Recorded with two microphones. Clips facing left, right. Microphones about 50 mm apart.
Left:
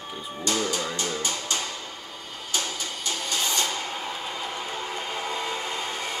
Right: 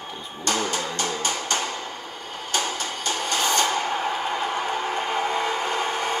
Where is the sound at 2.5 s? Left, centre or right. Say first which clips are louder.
Right 4 dB; right.